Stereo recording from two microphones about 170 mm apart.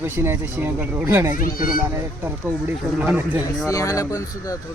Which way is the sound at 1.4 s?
55° left (ahead or behind).